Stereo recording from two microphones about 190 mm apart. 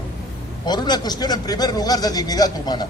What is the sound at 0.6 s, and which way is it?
A man's voice, 20° left (ahead or behind).